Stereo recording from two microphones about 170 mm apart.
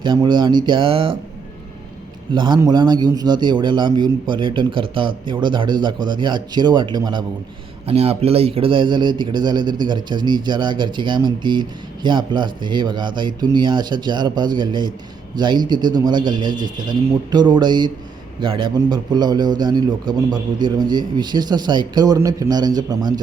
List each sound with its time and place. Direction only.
0.0 s a man's voice: 25° right (ahead or behind)
2.3 s a man's voice: 25° right (ahead or behind)
7.9 s a man's voice: 35° right (ahead or behind)